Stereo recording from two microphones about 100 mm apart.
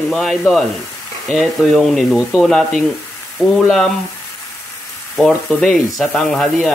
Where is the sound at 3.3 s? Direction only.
Centre (ahead or behind).